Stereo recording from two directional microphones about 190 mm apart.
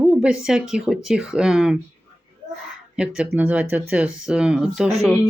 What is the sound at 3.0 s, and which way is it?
Speech, 5° right (ahead or behind).